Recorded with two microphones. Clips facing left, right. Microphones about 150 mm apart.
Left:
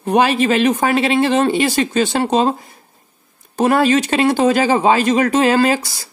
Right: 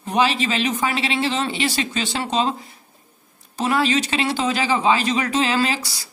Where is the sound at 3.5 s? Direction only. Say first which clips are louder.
Left 6 dB; 50° left (ahead or behind).